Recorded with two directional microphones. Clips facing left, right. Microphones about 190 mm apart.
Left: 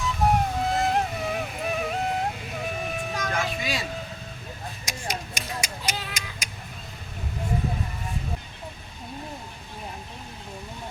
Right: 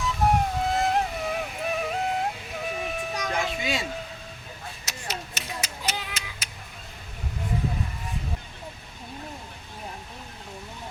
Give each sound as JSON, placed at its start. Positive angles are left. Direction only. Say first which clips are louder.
{"t": 0.0, "sound": "music", "louder": "even", "side_deg": 0}
{"t": 3.3, "sound": "vehicle", "louder": "right 2 dB", "side_deg": -25}
{"t": 4.9, "sound": "a sound", "louder": "left 3 dB", "side_deg": 15}